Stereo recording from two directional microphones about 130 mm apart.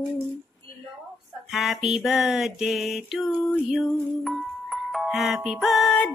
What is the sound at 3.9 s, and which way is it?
Music, centre (ahead or behind).